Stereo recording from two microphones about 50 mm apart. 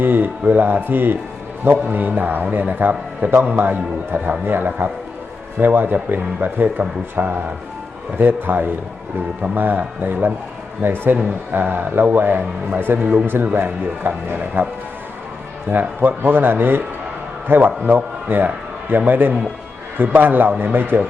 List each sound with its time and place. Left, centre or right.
0.0 s a man's voice: right
15.7 s a man's voice: right